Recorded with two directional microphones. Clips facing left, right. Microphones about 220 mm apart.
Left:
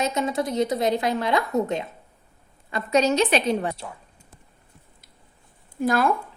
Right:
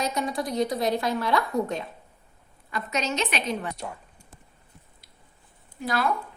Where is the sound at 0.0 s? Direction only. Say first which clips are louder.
Left 4 dB; 25° left (ahead or behind).